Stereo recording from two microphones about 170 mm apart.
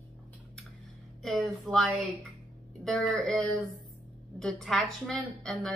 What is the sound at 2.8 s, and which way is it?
A woman's voice, centre (ahead or behind).